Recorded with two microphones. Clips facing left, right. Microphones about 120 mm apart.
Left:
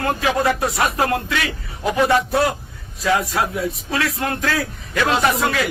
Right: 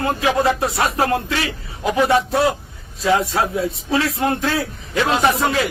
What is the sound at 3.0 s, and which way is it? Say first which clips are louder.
A man's voice: right 2 dB; 25° right (ahead or behind).